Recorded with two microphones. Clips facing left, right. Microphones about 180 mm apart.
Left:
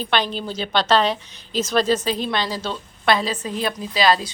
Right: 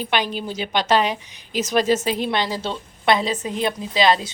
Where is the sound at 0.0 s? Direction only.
10° right (ahead or behind).